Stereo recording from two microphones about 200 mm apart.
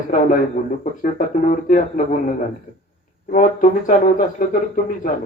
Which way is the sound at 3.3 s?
40° left (ahead or behind).